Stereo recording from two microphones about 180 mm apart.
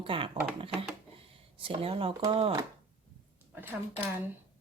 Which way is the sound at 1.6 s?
30° right (ahead or behind).